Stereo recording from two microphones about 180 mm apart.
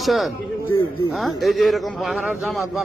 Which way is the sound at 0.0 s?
Centre (ahead or behind).